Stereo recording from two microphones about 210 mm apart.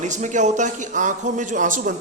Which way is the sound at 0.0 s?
35° right (ahead or behind).